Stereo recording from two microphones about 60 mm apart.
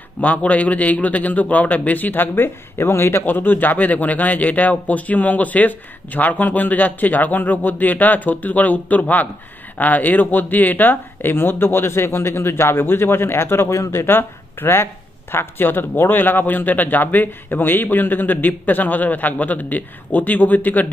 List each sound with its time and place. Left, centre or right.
0.2 s a man's voice: left